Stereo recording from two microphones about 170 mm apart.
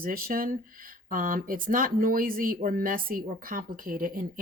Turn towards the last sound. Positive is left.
turn(degrees=-55)  # may be behind; listen again after turning